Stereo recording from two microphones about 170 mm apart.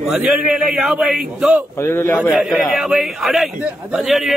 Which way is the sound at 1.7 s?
15° left (ahead or behind).